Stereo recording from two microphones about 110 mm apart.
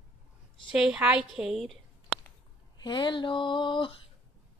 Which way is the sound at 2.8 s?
45° left (ahead or behind).